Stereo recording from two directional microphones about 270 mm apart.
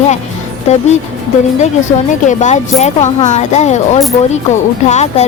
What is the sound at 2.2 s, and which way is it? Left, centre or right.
Speech, left.